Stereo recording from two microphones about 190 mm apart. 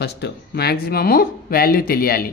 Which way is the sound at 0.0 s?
60° left (ahead or behind).